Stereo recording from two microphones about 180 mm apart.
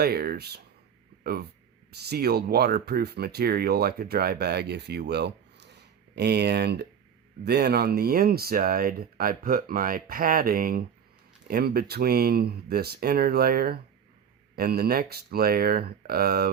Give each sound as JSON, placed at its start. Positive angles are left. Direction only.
{"t": 0.0, "sound": "speech", "side_deg": -60}